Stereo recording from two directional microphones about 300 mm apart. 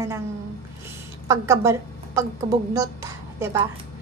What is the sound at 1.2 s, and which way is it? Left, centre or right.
A woman's voice, centre.